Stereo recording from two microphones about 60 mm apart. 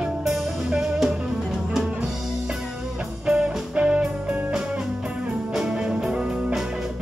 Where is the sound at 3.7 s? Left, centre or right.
Centre.